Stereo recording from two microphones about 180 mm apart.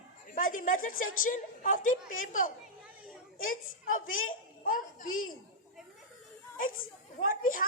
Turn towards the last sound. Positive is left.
turn(degrees=50)  # may be behind; listen again after turning